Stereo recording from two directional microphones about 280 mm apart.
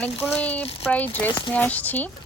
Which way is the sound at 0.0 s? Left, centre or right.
Centre.